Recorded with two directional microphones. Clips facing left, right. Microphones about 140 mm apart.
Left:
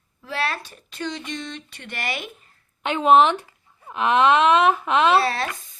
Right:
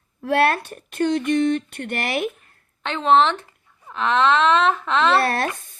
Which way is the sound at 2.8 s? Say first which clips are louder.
Left 1 dB; 15° left (ahead or behind).